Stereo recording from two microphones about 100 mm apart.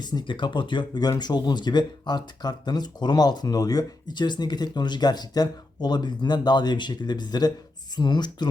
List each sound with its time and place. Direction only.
0.0 s speech: 45° left (ahead or behind)